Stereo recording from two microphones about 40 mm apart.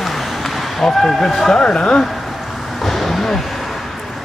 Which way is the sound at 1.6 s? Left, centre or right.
Left.